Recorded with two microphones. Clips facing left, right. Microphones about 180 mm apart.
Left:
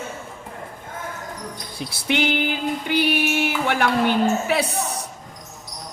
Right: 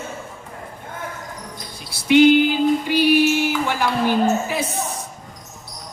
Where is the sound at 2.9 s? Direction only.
55° left (ahead or behind).